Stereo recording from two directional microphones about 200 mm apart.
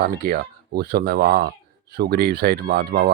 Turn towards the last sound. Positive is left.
turn(degrees=-50)  # may be behind; listen again after turning